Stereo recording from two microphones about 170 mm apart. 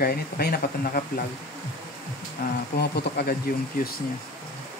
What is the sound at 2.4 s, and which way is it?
Speech, 60° left (ahead or behind).